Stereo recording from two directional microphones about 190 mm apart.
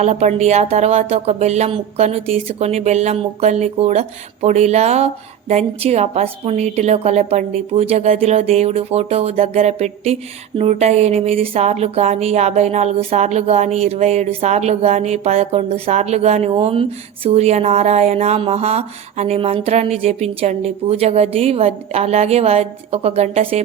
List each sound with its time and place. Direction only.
0.0 s speech: 35° right (ahead or behind)